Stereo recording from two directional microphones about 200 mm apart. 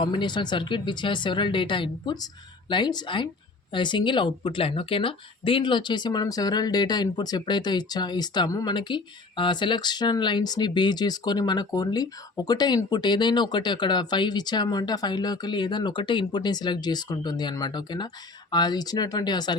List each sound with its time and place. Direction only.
0.0 s speech: 25° left (ahead or behind)